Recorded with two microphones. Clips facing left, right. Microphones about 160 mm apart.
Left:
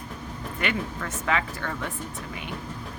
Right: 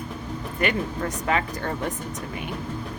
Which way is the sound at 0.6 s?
40° right (ahead or behind).